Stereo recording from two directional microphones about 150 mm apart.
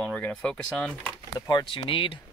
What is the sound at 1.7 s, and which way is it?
Speech, 35° left (ahead or behind).